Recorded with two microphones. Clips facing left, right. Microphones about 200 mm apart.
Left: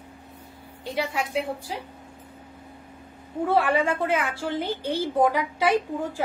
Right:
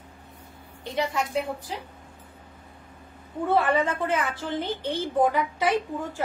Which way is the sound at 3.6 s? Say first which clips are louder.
Left 1 dB; 10° left (ahead or behind).